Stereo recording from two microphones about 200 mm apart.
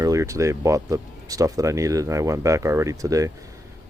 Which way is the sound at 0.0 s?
15° right (ahead or behind).